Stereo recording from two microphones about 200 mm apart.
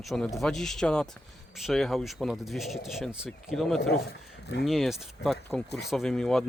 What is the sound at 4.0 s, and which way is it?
Speech, 55° left (ahead or behind).